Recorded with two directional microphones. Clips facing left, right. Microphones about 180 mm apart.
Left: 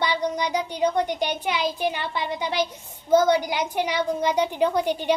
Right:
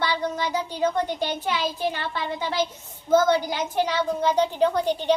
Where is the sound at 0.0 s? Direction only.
15° left (ahead or behind).